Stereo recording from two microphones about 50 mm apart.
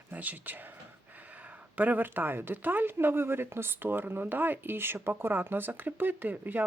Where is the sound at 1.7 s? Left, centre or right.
Right.